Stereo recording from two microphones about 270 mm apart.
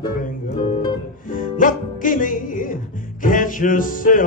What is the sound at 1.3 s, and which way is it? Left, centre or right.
Music, left.